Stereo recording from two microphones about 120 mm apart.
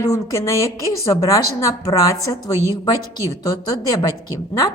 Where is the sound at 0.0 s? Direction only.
25° left (ahead or behind).